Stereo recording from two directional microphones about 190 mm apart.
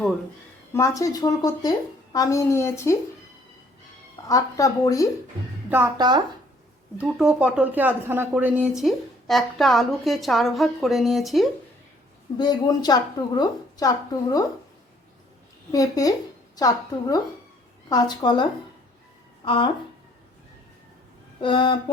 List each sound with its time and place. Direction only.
0.7 s a woman's voice: 15° left (ahead or behind)
4.3 s a woman's voice: 15° left (ahead or behind)
5.6 s speech: 10° right (ahead or behind)
6.0 s speech: 20° right (ahead or behind)
7.0 s a woman's voice: 5° right (ahead or behind)
12.4 s a woman's voice: 20° left (ahead or behind)
15.7 s a woman's voice: 20° left (ahead or behind)
19.5 s a woman's voice: 25° left (ahead or behind)
21.4 s a woman's voice: 25° left (ahead or behind)